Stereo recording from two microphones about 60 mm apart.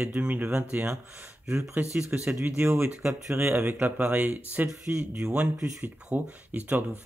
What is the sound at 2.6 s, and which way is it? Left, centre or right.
Speech, right.